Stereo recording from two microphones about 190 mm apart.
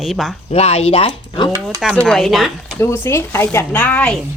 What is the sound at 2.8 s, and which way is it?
Speech, 10° left (ahead or behind).